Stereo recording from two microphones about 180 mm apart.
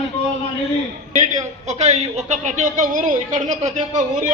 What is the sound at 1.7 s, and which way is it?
A woman's voice, 40° right (ahead or behind).